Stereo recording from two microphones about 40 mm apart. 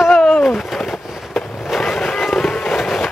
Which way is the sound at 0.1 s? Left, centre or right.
Centre.